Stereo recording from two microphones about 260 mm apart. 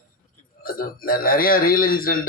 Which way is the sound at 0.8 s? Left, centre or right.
Left.